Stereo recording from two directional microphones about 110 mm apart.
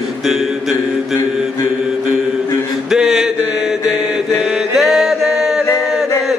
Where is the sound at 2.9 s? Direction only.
Centre (ahead or behind).